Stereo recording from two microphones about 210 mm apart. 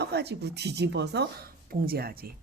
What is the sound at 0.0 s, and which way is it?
Speech, 50° right (ahead or behind).